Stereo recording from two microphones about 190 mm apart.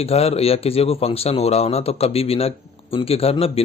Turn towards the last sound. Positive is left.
turn(degrees=30)  # may be behind; listen again after turning